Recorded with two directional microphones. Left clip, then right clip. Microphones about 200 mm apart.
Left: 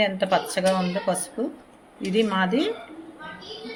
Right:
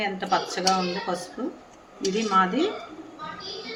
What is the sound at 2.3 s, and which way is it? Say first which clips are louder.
Speech: right 2 dB; 50° left (ahead or behind).